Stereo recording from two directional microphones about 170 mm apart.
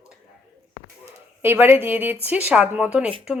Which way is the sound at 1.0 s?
15° right (ahead or behind).